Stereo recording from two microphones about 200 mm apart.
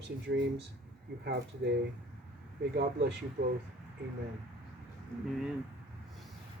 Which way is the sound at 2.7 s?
55° right (ahead or behind).